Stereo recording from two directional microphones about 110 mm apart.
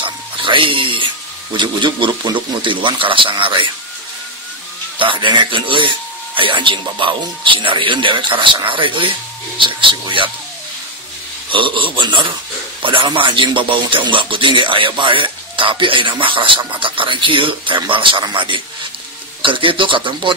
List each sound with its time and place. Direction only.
0.0 s dog: 50° right (ahead or behind)
1.5 s speech: 45° right (ahead or behind)
4.9 s speech: 50° right (ahead or behind)
11.5 s speech: 50° right (ahead or behind)